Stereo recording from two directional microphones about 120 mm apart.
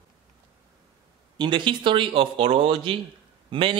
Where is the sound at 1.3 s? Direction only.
40° right (ahead or behind).